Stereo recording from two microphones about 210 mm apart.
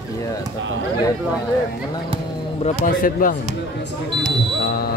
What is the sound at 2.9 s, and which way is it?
Speech, 40° left (ahead or behind).